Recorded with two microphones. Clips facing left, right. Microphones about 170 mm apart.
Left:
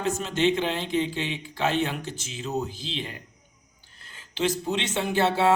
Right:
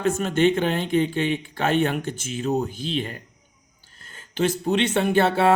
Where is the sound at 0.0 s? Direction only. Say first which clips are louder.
Right 4 dB; 55° right (ahead or behind).